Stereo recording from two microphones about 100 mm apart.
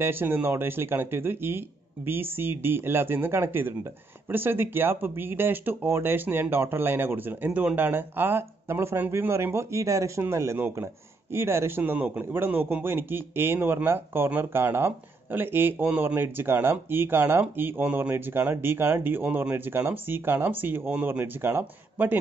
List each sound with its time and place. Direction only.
0.0 s speech: 20° right (ahead or behind)